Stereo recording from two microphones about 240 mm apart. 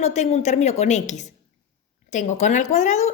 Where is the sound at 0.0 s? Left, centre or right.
Left.